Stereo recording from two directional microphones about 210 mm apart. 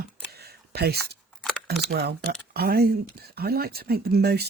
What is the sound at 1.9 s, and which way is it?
Speech, 50° right (ahead or behind).